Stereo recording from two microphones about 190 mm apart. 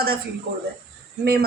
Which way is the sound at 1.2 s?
55° right (ahead or behind).